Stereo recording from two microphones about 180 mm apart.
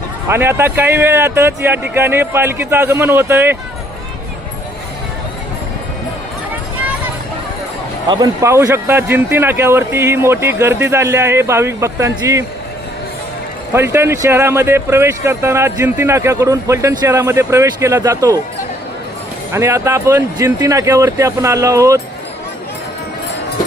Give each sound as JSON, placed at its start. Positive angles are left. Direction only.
{"t": 0.3, "sound": "speech", "side_deg": -15}
{"t": 8.0, "sound": "speech", "side_deg": -20}
{"t": 13.7, "sound": "speech", "side_deg": -15}
{"t": 19.5, "sound": "speech", "side_deg": -15}